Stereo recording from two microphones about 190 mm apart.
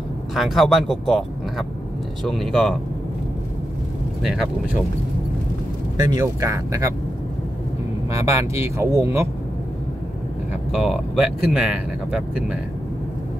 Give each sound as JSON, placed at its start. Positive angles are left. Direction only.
{"t": 0.3, "sound": "speech", "side_deg": 0}
{"t": 2.2, "sound": "speech", "side_deg": 0}
{"t": 4.2, "sound": "speech", "side_deg": 0}
{"t": 5.9, "sound": "speech", "side_deg": -20}
{"t": 8.1, "sound": "speech", "side_deg": -15}
{"t": 10.7, "sound": "speech", "side_deg": -5}